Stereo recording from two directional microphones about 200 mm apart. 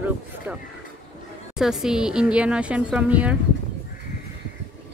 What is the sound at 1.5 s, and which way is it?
Speech, 5° right (ahead or behind).